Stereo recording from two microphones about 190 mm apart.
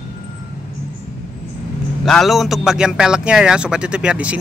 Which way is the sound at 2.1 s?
Centre (ahead or behind).